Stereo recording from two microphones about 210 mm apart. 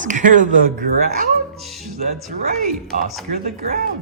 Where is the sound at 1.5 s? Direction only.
Centre (ahead or behind).